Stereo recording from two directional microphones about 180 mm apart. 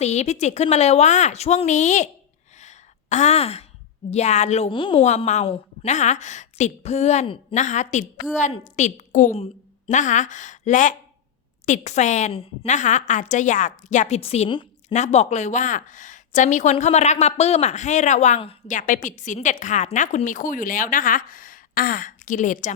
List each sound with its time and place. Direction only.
0.0 s a woman's voice: 40° left (ahead or behind)
2.6 s a sound: 40° left (ahead or behind)
4.1 s a woman's voice: 40° left (ahead or behind)
18.8 s a woman's voice: 45° left (ahead or behind)